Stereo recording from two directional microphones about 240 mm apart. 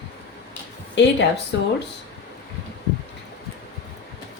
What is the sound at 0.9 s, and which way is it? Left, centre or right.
Speech, left.